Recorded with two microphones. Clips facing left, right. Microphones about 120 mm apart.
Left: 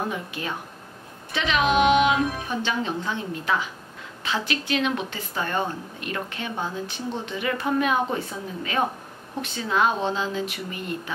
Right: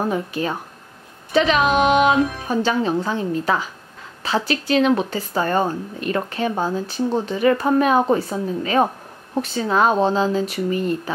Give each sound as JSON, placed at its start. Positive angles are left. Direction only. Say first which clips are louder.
{"t": 0.1, "sound": "a woman's voice", "louder": "right 8 dB", "side_deg": -40}